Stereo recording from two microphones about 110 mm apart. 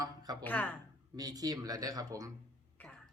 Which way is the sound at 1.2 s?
35° right (ahead or behind).